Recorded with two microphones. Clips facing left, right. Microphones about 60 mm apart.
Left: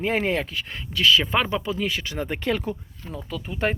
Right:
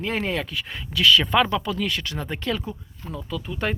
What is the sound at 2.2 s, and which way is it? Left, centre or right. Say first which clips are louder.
Speech: left 6 dB; left.